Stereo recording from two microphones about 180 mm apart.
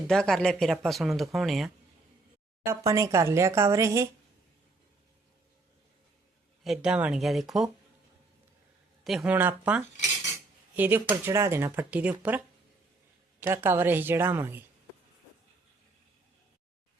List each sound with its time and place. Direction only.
0.1 s speech: 5° left (ahead or behind)
2.6 s speech: 15° right (ahead or behind)
6.7 s speech: 5° right (ahead or behind)
9.0 s speech: 5° right (ahead or behind)
13.4 s speech: 10° right (ahead or behind)